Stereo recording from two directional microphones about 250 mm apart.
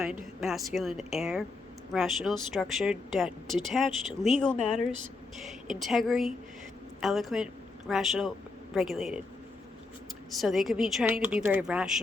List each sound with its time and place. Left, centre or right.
0.3 s speech: centre
10.4 s speech: centre